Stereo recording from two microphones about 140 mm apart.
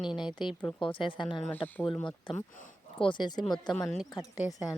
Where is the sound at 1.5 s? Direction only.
15° left (ahead or behind).